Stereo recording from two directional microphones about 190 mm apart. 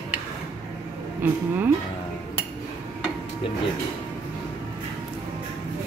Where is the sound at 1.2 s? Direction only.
10° right (ahead or behind).